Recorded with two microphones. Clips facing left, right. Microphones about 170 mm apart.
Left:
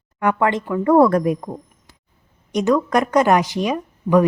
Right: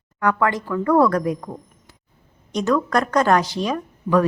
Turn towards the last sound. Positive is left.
turn(degrees=15)  # may be behind; listen again after turning